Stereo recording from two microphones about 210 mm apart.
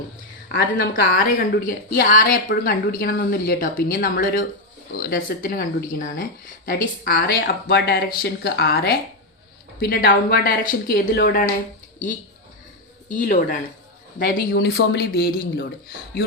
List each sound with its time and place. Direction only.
0.4 s a woman's voice: 45° left (ahead or behind)
13.1 s a woman's voice: 40° left (ahead or behind)